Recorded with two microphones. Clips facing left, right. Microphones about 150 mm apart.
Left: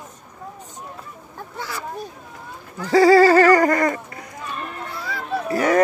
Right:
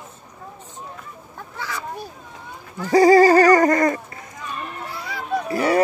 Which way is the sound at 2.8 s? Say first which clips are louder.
Even; 20° right (ahead or behind).